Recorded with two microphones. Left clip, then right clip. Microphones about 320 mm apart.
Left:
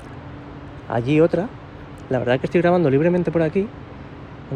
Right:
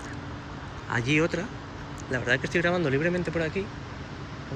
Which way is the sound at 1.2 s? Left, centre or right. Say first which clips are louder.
Left 10 dB; left.